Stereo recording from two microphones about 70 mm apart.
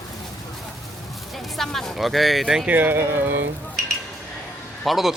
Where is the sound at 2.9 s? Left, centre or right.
Right.